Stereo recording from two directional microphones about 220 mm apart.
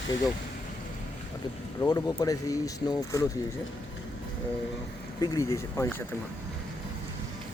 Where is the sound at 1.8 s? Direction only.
15° left (ahead or behind).